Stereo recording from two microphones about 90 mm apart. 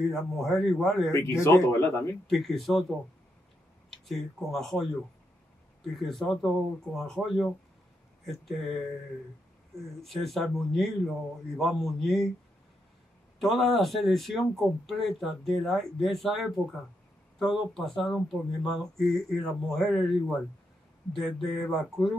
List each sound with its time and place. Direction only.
0.0 s speech: centre (ahead or behind)
1.1 s speech: 30° left (ahead or behind)
2.2 s speech: centre (ahead or behind)
3.9 s speech: centre (ahead or behind)
6.0 s speech: centre (ahead or behind)
10.0 s speech: centre (ahead or behind)
13.4 s speech: centre (ahead or behind)